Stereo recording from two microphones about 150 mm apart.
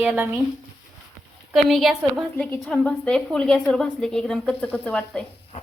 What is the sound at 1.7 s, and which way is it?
A woman's voice, centre (ahead or behind).